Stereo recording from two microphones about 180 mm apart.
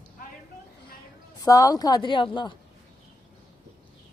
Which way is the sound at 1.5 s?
20° left (ahead or behind).